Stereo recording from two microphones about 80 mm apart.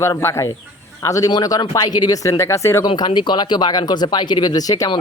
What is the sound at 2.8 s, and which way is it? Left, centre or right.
Speech, left.